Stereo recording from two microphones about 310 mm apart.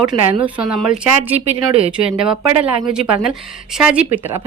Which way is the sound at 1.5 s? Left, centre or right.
Centre.